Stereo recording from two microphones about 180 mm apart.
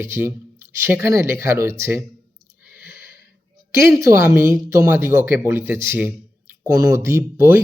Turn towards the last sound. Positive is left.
turn(degrees=-15)  # may be behind; listen again after turning